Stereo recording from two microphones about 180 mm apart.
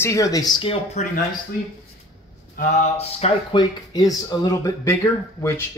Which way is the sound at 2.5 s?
40° left (ahead or behind).